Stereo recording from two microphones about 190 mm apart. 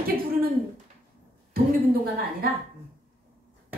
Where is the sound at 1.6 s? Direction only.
50° right (ahead or behind).